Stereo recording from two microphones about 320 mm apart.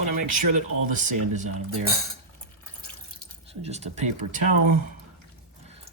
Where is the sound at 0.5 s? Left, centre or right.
Right.